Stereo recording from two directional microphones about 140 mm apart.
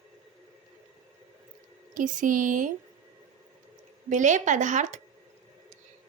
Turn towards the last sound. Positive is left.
turn(degrees=-60)  # may be behind; listen again after turning